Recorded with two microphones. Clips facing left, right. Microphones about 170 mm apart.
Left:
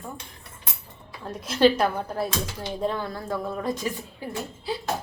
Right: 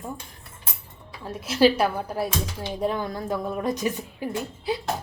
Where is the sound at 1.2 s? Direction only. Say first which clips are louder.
Even; 5° right (ahead or behind).